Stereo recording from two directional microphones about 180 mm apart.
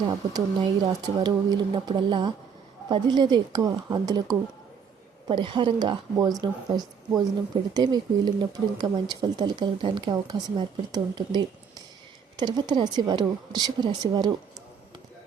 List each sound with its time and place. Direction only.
0.3 s speech: 25° right (ahead or behind)